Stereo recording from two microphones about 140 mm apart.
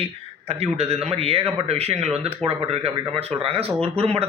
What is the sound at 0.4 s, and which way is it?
A man's voice, 45° right (ahead or behind).